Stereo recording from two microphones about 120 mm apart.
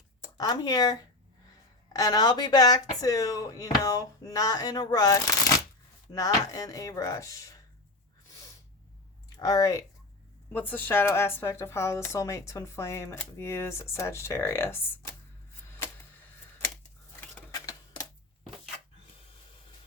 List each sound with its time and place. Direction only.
0.2 s speech: 30° left (ahead or behind)
9.4 s speech: 30° left (ahead or behind)
10.5 s speech: 15° left (ahead or behind)
15.6 s a sound: 20° left (ahead or behind)
17.5 s typewriter: 30° left (ahead or behind)